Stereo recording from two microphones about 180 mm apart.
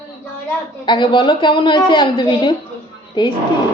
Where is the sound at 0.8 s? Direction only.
25° left (ahead or behind).